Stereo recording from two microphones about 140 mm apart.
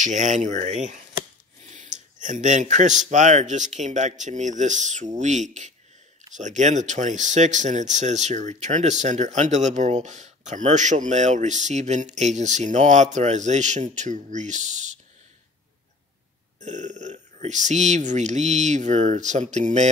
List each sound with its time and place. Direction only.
0.0 s speech: 60° right (ahead or behind)
16.5 s speech: 60° right (ahead or behind)